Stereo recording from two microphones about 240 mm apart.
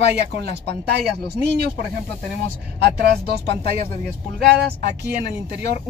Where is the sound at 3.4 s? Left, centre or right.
Left.